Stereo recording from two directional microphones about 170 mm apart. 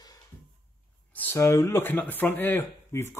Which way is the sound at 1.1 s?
10° left (ahead or behind).